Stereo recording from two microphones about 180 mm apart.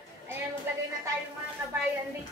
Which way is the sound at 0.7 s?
10° right (ahead or behind).